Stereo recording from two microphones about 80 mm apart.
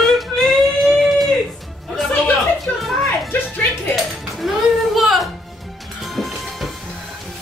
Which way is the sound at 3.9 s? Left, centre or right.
Centre.